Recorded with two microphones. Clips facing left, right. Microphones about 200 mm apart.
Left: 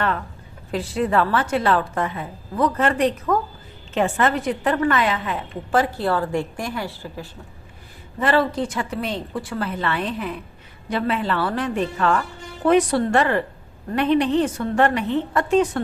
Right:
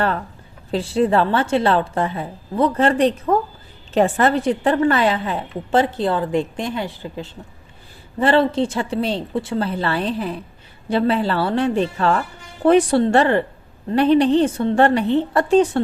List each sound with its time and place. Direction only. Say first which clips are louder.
0.7 s a woman's voice: right 4 dB; 30° right (ahead or behind)